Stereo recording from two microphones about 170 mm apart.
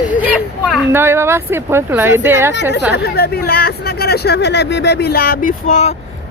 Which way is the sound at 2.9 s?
70° left (ahead or behind).